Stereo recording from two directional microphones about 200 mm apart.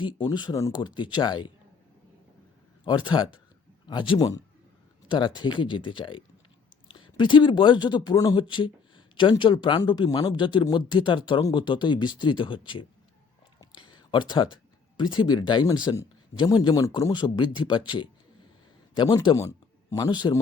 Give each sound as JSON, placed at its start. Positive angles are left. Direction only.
{"t": 0.0, "sound": "speech", "side_deg": 20}
{"t": 2.8, "sound": "speech", "side_deg": 20}